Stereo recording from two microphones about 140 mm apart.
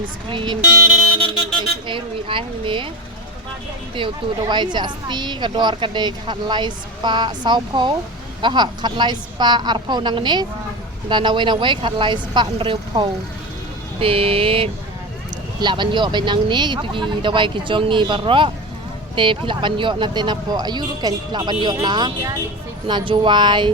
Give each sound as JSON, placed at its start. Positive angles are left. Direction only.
{"t": 0.0, "sound": "speech", "side_deg": -35}
{"t": 1.9, "sound": "speech", "side_deg": -40}
{"t": 3.9, "sound": "speech", "side_deg": -35}